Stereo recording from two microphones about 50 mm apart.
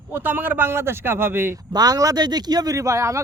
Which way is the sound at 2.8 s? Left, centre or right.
Right.